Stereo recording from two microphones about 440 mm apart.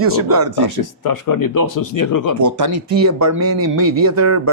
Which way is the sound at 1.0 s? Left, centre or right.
Left.